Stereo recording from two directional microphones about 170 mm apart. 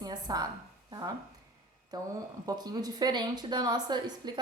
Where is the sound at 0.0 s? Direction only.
25° right (ahead or behind).